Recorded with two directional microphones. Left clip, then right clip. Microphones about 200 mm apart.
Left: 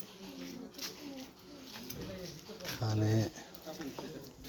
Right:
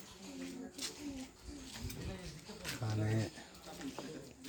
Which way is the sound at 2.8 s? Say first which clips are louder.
Left 7 dB; 20° left (ahead or behind).